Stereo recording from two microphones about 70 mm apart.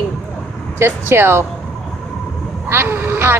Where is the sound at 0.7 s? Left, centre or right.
Right.